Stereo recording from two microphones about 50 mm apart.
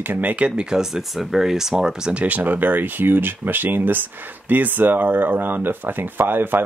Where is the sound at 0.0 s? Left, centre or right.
Right.